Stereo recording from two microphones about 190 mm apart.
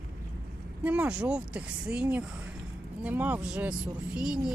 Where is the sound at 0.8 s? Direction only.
5° right (ahead or behind).